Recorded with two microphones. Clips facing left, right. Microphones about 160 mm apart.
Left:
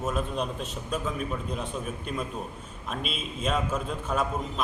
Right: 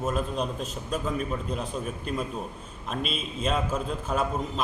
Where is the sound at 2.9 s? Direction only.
Centre (ahead or behind).